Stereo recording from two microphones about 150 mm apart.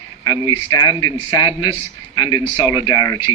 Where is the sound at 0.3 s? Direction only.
30° left (ahead or behind).